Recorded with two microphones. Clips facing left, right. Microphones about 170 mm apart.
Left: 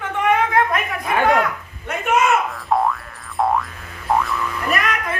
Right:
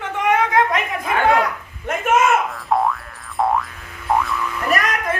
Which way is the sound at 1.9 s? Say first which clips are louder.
Right 2 dB; 45° right (ahead or behind).